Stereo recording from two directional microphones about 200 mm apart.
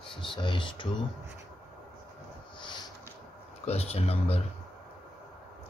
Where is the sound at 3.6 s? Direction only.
30° left (ahead or behind).